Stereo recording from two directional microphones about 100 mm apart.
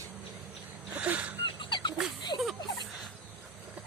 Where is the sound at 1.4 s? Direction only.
55° left (ahead or behind).